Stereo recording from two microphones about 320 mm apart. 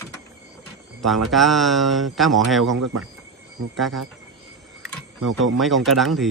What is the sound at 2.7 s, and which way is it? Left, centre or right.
Speech, right.